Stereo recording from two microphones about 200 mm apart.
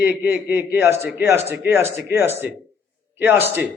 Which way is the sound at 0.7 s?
10° right (ahead or behind).